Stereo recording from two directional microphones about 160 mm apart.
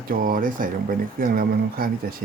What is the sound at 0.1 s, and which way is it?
Speech, 65° right (ahead or behind).